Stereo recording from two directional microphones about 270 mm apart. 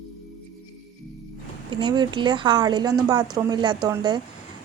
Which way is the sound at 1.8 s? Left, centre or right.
Centre.